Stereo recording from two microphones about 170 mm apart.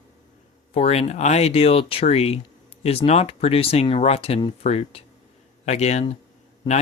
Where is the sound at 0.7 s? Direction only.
40° left (ahead or behind).